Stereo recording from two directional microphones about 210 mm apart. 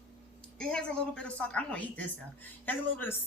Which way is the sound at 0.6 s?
5° left (ahead or behind).